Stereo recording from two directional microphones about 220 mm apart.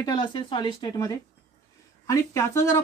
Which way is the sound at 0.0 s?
20° left (ahead or behind).